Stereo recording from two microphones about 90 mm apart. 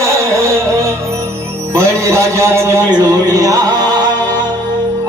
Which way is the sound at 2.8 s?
50° right (ahead or behind).